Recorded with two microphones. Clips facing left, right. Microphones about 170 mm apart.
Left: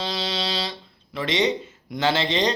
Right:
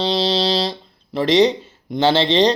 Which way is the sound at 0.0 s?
30° right (ahead or behind).